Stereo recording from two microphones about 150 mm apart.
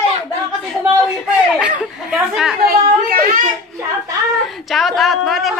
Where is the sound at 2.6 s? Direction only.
75° right (ahead or behind).